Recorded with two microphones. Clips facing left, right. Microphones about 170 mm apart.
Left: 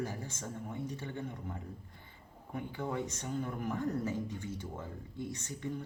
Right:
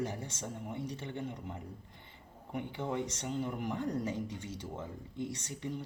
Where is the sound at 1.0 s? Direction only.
20° right (ahead or behind).